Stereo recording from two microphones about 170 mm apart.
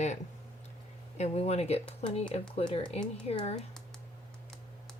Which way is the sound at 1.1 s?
40° left (ahead or behind).